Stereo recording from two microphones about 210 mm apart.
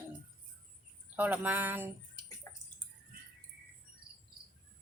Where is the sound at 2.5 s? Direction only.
15° left (ahead or behind).